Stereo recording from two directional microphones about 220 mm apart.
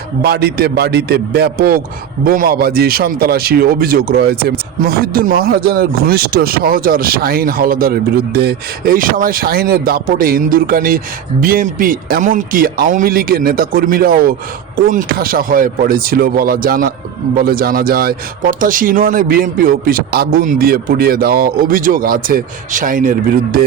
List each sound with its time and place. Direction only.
0.2 s a man's voice: 45° right (ahead or behind)